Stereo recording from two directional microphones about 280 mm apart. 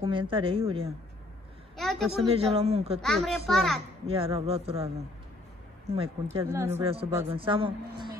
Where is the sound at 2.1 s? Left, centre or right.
Right.